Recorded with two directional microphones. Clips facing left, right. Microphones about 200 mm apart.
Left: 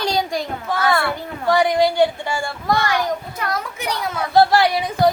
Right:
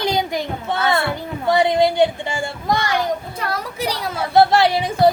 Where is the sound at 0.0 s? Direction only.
20° right (ahead or behind).